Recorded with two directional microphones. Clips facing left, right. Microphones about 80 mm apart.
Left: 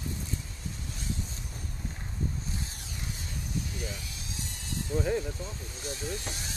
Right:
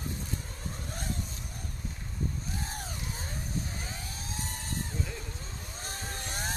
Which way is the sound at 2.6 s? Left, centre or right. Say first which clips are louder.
Right 4 dB; right.